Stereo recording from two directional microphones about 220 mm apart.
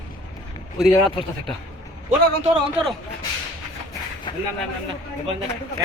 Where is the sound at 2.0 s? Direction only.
30° right (ahead or behind).